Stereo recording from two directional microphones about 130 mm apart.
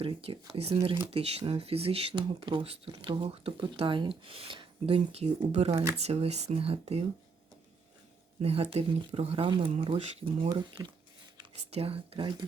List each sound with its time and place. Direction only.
0.0 s a sound: 45° right (ahead or behind)
0.5 s speech: 50° right (ahead or behind)
8.4 s speech: 50° right (ahead or behind)
11.7 s speech: 50° right (ahead or behind)